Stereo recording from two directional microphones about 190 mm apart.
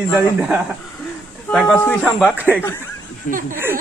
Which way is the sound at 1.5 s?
5° left (ahead or behind).